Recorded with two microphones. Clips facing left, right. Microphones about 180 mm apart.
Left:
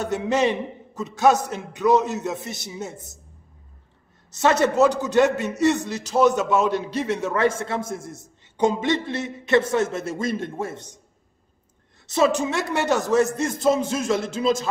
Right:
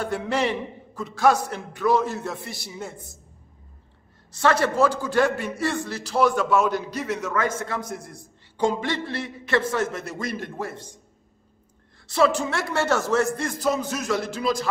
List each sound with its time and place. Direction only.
0.0 s a man's voice: 20° left (ahead or behind)
4.3 s a man's voice: 20° left (ahead or behind)
12.1 s a man's voice: 20° left (ahead or behind)